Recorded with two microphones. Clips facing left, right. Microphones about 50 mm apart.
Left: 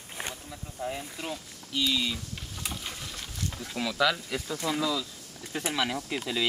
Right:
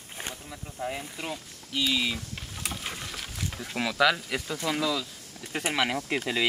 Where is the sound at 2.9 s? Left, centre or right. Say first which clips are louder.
Right 3 dB; right.